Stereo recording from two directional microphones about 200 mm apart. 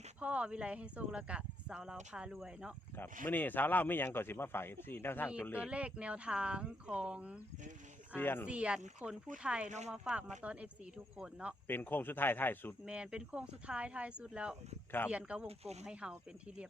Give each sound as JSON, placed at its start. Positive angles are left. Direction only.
{"t": 0.2, "sound": "speech", "side_deg": -5}
{"t": 3.2, "sound": "a man's voice", "side_deg": 10}
{"t": 5.6, "sound": "speech", "side_deg": -5}
{"t": 8.1, "sound": "a man's voice", "side_deg": 10}
{"t": 8.4, "sound": "speech", "side_deg": -5}
{"t": 9.6, "sound": "speech", "side_deg": -35}
{"t": 9.9, "sound": "speech", "side_deg": -5}
{"t": 11.7, "sound": "a man's voice", "side_deg": 10}
{"t": 12.8, "sound": "speech", "side_deg": -5}
{"t": 15.4, "sound": "speech", "side_deg": -30}
{"t": 15.9, "sound": "speech", "side_deg": -5}